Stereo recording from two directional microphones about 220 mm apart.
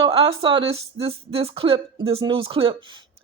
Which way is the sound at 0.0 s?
25° right (ahead or behind).